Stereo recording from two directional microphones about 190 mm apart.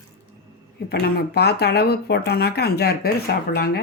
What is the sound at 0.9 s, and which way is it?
Speech, 55° left (ahead or behind).